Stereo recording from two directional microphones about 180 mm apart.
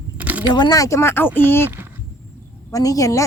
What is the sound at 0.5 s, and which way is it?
Speech, 20° left (ahead or behind).